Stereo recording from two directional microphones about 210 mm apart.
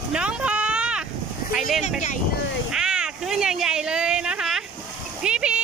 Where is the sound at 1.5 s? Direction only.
Centre (ahead or behind).